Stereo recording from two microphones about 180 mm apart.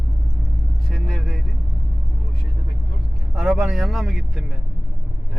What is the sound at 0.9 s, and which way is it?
Vehicle, centre (ahead or behind).